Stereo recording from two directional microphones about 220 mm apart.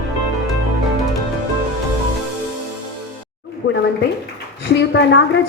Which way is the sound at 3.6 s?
50° left (ahead or behind).